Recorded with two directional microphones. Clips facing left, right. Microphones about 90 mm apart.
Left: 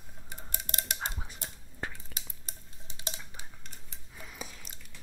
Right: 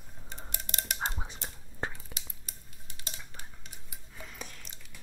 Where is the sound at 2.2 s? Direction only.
25° left (ahead or behind).